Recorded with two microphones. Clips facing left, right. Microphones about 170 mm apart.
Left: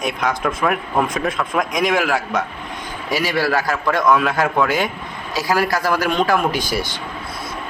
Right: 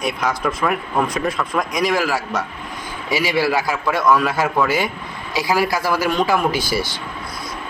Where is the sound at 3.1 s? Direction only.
10° right (ahead or behind).